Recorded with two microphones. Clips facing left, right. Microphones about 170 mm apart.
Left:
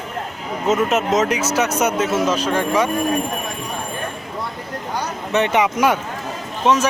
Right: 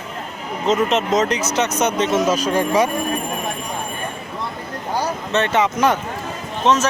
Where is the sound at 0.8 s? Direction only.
5° left (ahead or behind).